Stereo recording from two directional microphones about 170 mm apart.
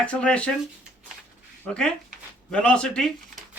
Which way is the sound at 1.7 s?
5° left (ahead or behind).